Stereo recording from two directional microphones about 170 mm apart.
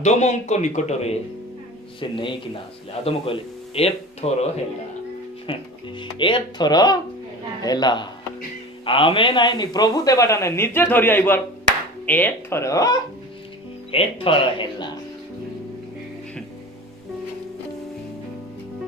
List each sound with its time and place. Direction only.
0.0 s speech: 40° left (ahead or behind)
2.0 s speech: 30° left (ahead or behind)
5.5 s a man's voice: 30° left (ahead or behind)
13.9 s a man's voice: 30° left (ahead or behind)